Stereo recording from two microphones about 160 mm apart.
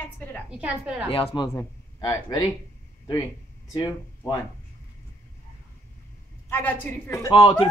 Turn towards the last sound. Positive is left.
turn(degrees=35)  # may be behind; listen again after turning